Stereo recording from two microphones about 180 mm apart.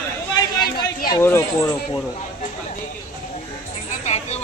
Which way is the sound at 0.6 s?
55° left (ahead or behind).